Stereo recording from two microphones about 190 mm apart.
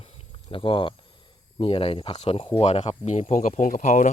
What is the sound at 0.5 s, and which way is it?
Speech, 25° left (ahead or behind).